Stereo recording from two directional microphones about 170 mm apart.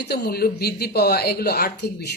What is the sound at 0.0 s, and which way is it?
Speech, 75° left (ahead or behind).